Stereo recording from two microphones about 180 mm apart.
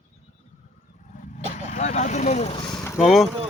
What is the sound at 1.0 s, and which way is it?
Speech, 45° left (ahead or behind).